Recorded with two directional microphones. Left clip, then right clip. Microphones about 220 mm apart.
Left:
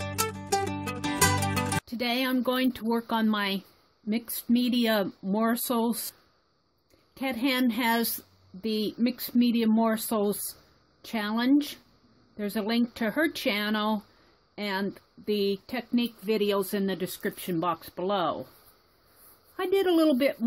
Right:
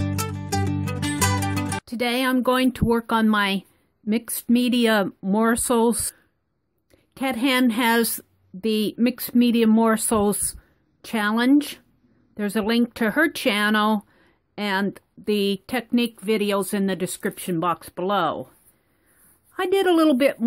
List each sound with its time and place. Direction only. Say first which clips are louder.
0.0 s music: right 2 dB; centre (ahead or behind)
1.9 s speech: right 6 dB; 25° right (ahead or behind)
7.2 s speech: right 6 dB; 25° right (ahead or behind)
19.5 s speech: right 5 dB; 25° right (ahead or behind)